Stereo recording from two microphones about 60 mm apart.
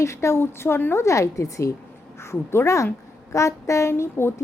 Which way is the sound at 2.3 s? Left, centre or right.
Left.